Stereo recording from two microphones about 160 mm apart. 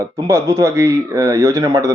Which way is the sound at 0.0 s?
20° right (ahead or behind).